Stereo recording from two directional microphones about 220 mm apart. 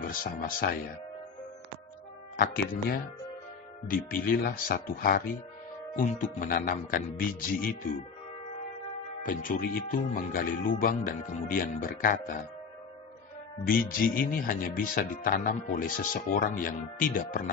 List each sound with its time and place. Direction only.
0.0 s speech: 40° left (ahead or behind)
2.3 s speech: 40° left (ahead or behind)
9.2 s speech: 40° left (ahead or behind)
13.7 s speech: 40° left (ahead or behind)